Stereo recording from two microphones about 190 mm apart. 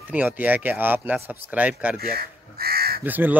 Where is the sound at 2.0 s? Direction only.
55° right (ahead or behind).